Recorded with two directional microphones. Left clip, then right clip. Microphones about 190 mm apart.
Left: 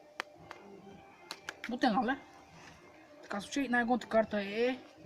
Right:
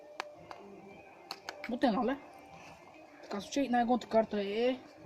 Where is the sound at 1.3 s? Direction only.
Centre (ahead or behind).